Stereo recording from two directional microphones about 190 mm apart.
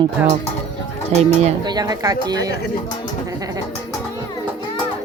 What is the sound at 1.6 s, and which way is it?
Speech, 20° right (ahead or behind).